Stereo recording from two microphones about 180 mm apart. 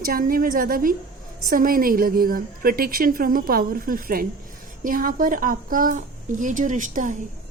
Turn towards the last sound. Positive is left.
turn(degrees=-45)  # may be behind; listen again after turning